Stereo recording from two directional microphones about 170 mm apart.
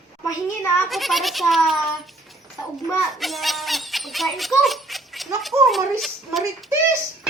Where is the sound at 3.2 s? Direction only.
Centre (ahead or behind).